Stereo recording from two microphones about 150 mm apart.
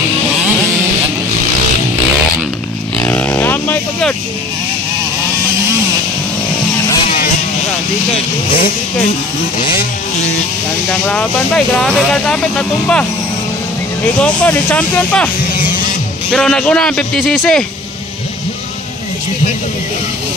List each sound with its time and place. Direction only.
3.0 s a sound: 10° left (ahead or behind)
9.6 s vehicle: 70° left (ahead or behind)
10.9 s speech: 5° left (ahead or behind)
14.2 s speech: 10° left (ahead or behind)
16.3 s speech: 5° left (ahead or behind)